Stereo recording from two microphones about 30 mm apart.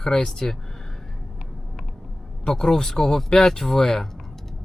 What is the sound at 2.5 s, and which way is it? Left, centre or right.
Speech, centre.